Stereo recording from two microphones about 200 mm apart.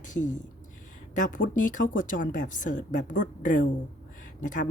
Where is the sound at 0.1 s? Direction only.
40° left (ahead or behind).